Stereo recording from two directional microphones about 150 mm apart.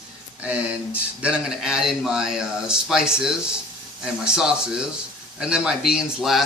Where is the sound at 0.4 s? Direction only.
10° right (ahead or behind).